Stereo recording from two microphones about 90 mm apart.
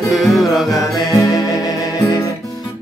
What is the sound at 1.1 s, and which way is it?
Music, 45° left (ahead or behind).